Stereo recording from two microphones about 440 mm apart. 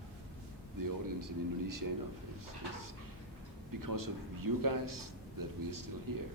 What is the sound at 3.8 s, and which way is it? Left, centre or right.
A man's voice, right.